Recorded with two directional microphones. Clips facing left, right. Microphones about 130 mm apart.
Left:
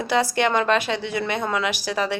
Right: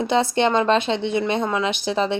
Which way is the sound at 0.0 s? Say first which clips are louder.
Right 2 dB; 25° right (ahead or behind).